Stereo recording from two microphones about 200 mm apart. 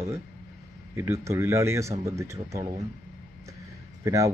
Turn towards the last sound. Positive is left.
turn(degrees=-15)  # may be behind; listen again after turning